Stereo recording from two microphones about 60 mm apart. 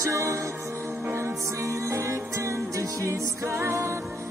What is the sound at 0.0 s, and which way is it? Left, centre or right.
Music, right.